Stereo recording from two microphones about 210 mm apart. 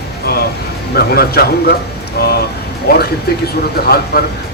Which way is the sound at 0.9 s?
50° left (ahead or behind).